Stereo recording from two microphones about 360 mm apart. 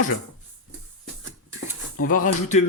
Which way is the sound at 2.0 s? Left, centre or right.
Left.